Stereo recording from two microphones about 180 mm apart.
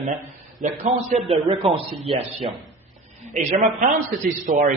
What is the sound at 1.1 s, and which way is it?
A man's voice, 30° right (ahead or behind).